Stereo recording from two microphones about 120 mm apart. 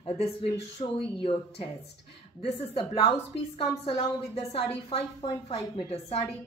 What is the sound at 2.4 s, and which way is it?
A woman's voice, 50° left (ahead or behind).